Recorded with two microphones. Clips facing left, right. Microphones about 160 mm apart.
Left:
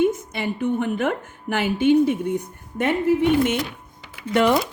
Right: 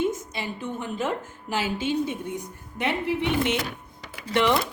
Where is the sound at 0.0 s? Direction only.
60° left (ahead or behind).